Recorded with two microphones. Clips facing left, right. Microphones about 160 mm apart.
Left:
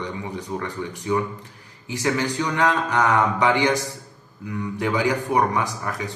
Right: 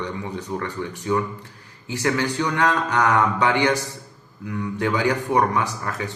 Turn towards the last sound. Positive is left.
turn(degrees=15)  # may be behind; listen again after turning